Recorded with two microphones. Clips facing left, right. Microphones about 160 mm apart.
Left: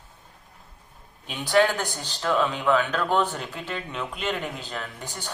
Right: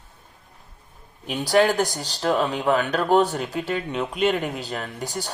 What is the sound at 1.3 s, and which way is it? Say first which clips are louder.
A woman's voice: right 3 dB; 40° right (ahead or behind).